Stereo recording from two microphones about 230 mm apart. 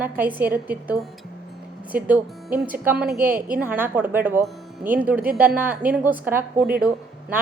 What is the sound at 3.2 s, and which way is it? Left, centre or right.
Speech, right.